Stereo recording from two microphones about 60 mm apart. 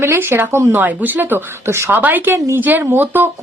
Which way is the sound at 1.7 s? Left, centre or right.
Right.